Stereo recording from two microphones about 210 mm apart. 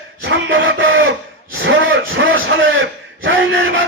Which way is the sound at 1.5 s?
65° right (ahead or behind).